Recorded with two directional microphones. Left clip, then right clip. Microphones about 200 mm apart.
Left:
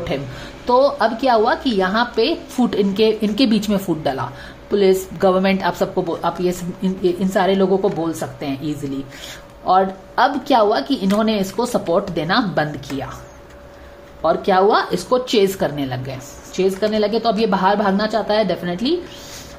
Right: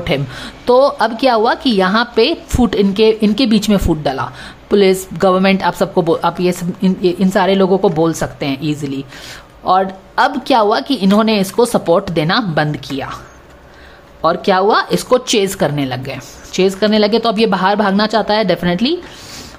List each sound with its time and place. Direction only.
0.7 s a woman's voice: 30° right (ahead or behind)
14.2 s a woman's voice: 30° right (ahead or behind)